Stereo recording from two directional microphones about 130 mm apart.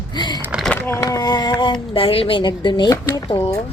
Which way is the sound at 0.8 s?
15° left (ahead or behind).